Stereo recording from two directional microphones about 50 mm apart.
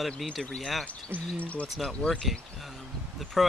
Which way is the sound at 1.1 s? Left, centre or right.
Right.